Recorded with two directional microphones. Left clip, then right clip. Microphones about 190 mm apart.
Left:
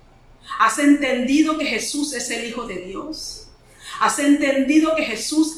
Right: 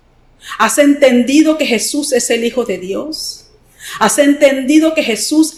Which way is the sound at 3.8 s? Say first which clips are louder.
Right 8 dB; 45° right (ahead or behind).